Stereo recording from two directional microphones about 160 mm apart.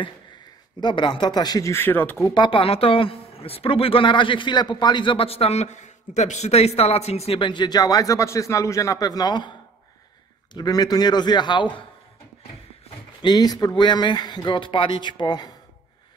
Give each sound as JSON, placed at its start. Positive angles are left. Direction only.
{"t": 0.7, "sound": "speech", "side_deg": 30}
{"t": 2.2, "sound": "a man's voice", "side_deg": 30}
{"t": 10.5, "sound": "speech", "side_deg": 25}
{"t": 13.2, "sound": "speech", "side_deg": 25}